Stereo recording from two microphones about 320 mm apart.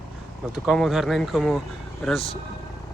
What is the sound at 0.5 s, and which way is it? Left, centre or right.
Speech, centre.